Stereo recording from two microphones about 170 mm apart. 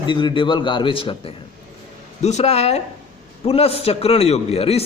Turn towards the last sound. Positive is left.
turn(degrees=35)  # may be behind; listen again after turning